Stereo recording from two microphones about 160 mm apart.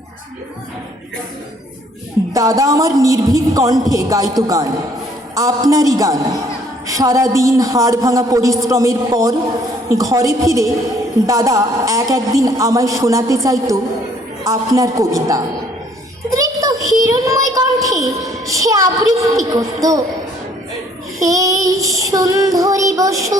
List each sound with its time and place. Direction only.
2.3 s a man's voice: 20° right (ahead or behind)
21.2 s a man's voice: 20° right (ahead or behind)